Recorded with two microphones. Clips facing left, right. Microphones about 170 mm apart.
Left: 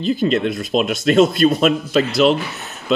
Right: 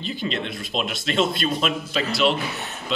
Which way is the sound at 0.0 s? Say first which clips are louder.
Left 11 dB; 45° left (ahead or behind).